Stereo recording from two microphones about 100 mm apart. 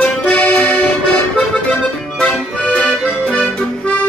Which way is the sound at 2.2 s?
10° left (ahead or behind).